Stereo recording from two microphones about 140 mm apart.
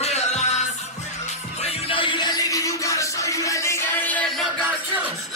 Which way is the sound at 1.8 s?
40° left (ahead or behind).